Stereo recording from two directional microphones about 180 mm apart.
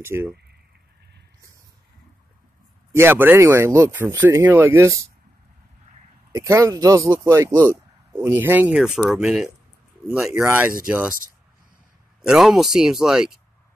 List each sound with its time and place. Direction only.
0.0 s speech: 15° right (ahead or behind)
2.9 s speech: 15° right (ahead or behind)
6.3 s speech: 15° right (ahead or behind)
12.2 s speech: centre (ahead or behind)